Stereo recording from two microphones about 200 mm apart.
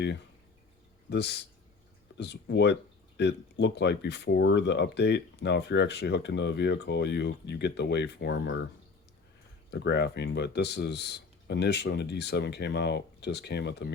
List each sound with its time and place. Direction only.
1.1 s speech: 60° left (ahead or behind)
9.7 s speech: 55° left (ahead or behind)